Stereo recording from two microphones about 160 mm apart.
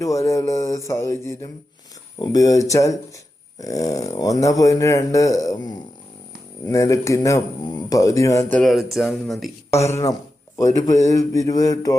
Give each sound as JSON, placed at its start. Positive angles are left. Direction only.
{"t": 0.0, "sound": "speech", "side_deg": 20}
{"t": 9.8, "sound": "speech", "side_deg": 20}